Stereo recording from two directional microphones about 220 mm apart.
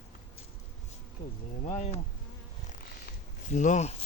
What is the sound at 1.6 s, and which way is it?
Speech, 30° left (ahead or behind).